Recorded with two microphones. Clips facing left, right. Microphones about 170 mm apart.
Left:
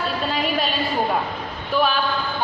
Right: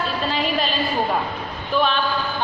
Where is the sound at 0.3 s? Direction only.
Centre (ahead or behind).